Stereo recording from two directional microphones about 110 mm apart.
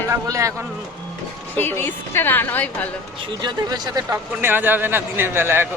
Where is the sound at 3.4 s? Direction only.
40° right (ahead or behind).